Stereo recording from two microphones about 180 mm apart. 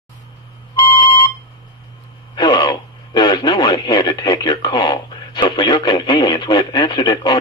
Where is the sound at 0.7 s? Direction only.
20° left (ahead or behind).